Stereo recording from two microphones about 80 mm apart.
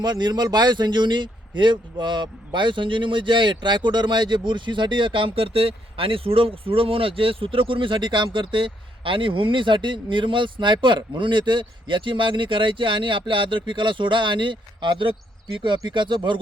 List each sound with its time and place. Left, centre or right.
0.0 s a man's voice: right
15.9 s speech: right